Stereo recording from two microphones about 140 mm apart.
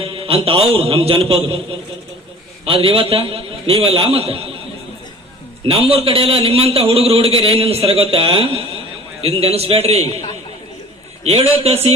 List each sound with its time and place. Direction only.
0.0 s a man's voice: 40° right (ahead or behind)
2.6 s a man's voice: 40° right (ahead or behind)
5.6 s speech: 45° right (ahead or behind)
11.2 s speech: 50° right (ahead or behind)